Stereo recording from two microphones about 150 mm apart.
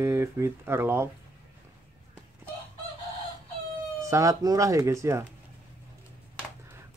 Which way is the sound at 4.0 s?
20° right (ahead or behind).